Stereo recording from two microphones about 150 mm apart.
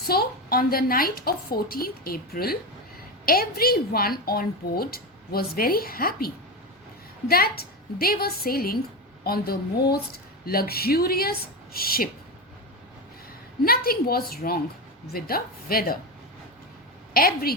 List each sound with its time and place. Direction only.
0.1 s a woman's voice: 90° left
13.7 s a woman's voice: 85° left
17.2 s a woman's voice: 85° left